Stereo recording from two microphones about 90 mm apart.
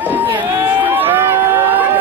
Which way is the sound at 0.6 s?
20° right (ahead or behind).